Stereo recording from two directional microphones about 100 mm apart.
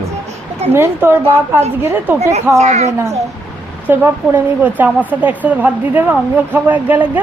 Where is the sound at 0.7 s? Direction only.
25° right (ahead or behind).